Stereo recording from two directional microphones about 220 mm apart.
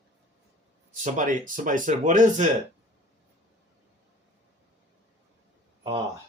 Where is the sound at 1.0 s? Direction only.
35° right (ahead or behind).